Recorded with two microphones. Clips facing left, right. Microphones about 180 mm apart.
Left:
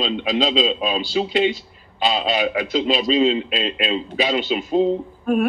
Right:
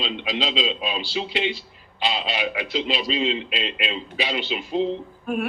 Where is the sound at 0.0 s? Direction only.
45° left (ahead or behind).